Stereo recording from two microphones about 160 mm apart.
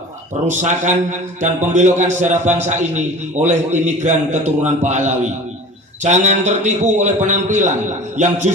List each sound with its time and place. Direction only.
0.4 s a man's voice: 50° right (ahead or behind)